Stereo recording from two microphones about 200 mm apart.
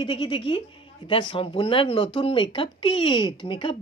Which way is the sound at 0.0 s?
25° left (ahead or behind).